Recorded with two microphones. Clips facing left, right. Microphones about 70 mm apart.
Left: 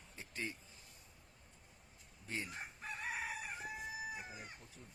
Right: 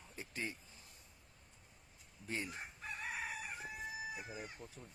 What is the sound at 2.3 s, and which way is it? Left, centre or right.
Chicken, centre.